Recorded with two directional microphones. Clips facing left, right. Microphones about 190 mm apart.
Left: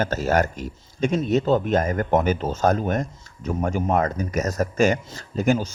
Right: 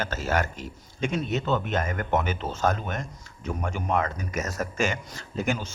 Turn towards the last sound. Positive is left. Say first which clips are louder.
# left 7 dB
turn(degrees=40)  # may be behind; listen again after turning